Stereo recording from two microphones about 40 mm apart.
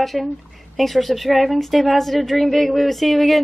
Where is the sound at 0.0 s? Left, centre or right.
Centre.